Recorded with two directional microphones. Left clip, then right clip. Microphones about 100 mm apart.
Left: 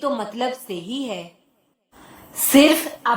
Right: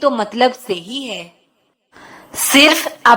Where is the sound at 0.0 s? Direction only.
35° right (ahead or behind).